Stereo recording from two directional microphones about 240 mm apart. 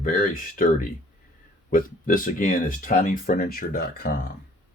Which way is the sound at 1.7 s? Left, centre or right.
Left.